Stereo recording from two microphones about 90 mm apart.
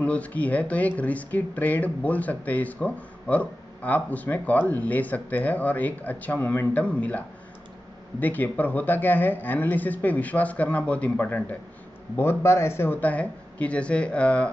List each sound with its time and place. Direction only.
0.0 s speech: 15° left (ahead or behind)